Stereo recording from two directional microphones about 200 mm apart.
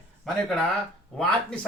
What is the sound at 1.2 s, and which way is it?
Speech, 5° left (ahead or behind).